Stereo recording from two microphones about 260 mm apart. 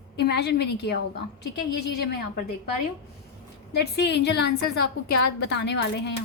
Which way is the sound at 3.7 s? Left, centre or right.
Left.